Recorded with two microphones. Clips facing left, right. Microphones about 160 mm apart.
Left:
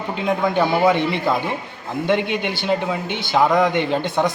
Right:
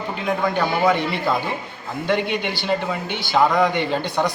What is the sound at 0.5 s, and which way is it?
A man's voice, 20° left (ahead or behind).